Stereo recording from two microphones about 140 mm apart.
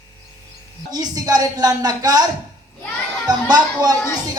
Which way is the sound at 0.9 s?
30° right (ahead or behind).